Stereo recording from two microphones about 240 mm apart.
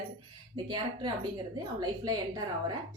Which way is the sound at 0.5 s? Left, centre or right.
Centre.